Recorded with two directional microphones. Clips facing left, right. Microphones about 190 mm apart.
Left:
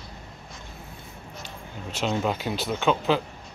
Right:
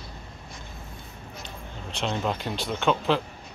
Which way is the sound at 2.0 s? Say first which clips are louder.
Left 2 dB; 5° left (ahead or behind).